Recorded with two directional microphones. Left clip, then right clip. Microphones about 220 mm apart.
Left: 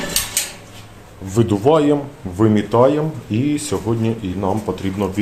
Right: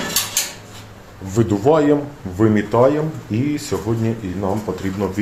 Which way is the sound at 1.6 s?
15° left (ahead or behind).